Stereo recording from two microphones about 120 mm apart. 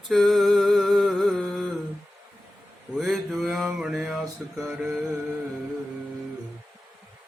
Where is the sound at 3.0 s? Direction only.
Centre (ahead or behind).